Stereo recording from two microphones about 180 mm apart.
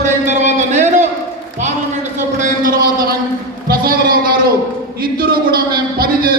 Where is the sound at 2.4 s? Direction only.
45° right (ahead or behind).